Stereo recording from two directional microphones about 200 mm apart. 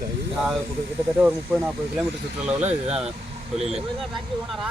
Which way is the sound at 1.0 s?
5° right (ahead or behind).